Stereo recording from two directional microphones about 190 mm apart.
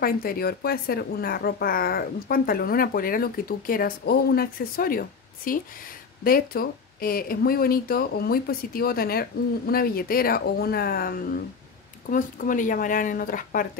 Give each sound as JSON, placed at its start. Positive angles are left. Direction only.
{"t": 0.0, "sound": "speech", "side_deg": 50}